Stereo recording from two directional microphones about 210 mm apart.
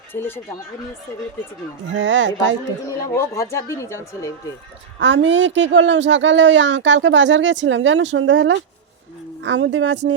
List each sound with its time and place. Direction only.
0.1 s speech: 10° left (ahead or behind)
1.9 s speech: 60° right (ahead or behind)
3.2 s speech: 15° left (ahead or behind)
4.9 s speech: 60° right (ahead or behind)